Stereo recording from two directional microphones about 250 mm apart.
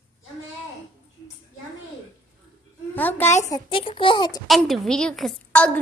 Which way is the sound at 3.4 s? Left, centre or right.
Centre.